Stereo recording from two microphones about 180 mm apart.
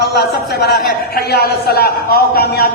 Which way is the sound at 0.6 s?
60° left (ahead or behind).